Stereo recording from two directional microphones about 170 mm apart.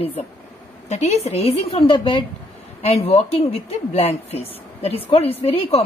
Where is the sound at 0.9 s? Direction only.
40° left (ahead or behind).